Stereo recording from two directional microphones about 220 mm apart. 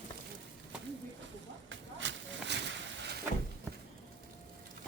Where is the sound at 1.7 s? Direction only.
55° right (ahead or behind).